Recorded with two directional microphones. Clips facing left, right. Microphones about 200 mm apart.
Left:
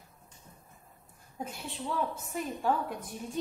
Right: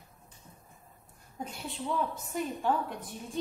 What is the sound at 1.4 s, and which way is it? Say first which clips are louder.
A woman's voice: even; centre (ahead or behind).